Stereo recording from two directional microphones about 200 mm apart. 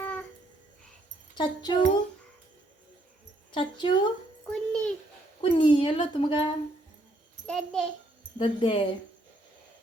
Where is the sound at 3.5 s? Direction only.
25° left (ahead or behind).